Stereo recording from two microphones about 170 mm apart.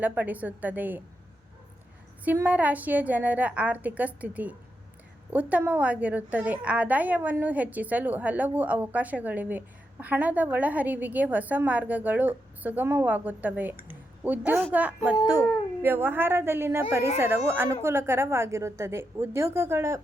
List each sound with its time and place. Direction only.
0.0 s a woman's voice: 10° right (ahead or behind)
2.2 s a woman's voice: 10° right (ahead or behind)